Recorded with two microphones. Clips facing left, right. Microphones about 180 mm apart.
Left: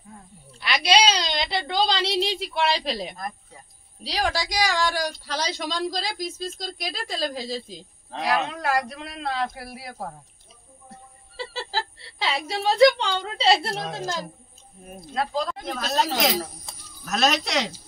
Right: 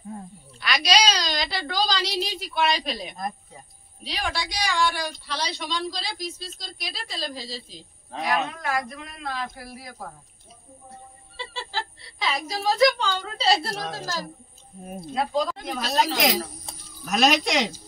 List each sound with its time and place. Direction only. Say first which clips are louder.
0.6 s a woman's voice: left 2 dB; 25° left (ahead or behind); by 7.6 s 50° left (ahead or behind)
8.2 s speech: left 1 dB; 35° left (ahead or behind)
8.8 s a man's voice: left 4 dB; 85° left
11.3 s speech: left 3 dB; 40° left (ahead or behind); by 14.2 s 25° left (ahead or behind)
15.0 s speech: right 2 dB; 5° right (ahead or behind)